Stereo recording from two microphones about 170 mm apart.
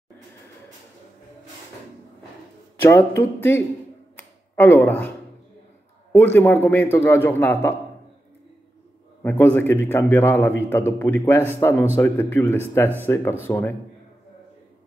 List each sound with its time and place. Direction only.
2.8 s a man's voice: 15° left (ahead or behind)
4.2 s a sound: 10° left (ahead or behind)
6.1 s a man's voice: 10° left (ahead or behind)
9.2 s a man's voice: 10° left (ahead or behind)